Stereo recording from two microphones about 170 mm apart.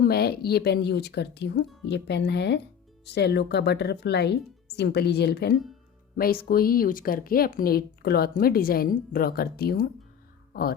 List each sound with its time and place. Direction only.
0.0 s speech: 65° left (ahead or behind)
6.1 s speech: 60° left (ahead or behind)